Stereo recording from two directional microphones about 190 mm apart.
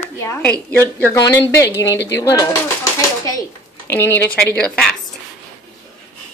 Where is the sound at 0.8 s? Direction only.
15° left (ahead or behind).